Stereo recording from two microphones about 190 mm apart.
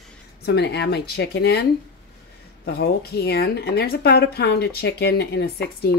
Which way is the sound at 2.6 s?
55° left (ahead or behind).